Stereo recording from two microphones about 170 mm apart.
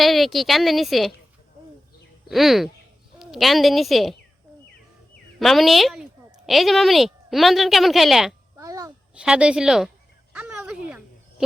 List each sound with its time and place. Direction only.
0.0 s a woman's voice: centre (ahead or behind)
2.3 s a woman's voice: centre (ahead or behind)
5.4 s a woman's voice: centre (ahead or behind)
8.5 s a sound: 20° right (ahead or behind)
9.1 s a woman's voice: 5° right (ahead or behind)
10.3 s a sound: 5° right (ahead or behind)